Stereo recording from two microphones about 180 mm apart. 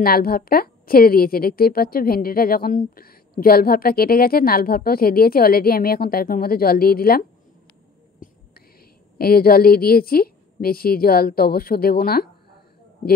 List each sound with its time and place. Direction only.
0.0 s a woman's voice: 55° left (ahead or behind)
8.2 s whispering: 50° left (ahead or behind)
9.2 s a woman's voice: 55° left (ahead or behind)